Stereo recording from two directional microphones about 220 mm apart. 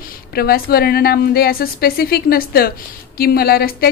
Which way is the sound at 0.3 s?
45° left (ahead or behind).